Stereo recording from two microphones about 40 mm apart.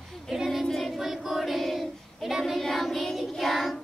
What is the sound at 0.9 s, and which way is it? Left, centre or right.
Child singing, centre.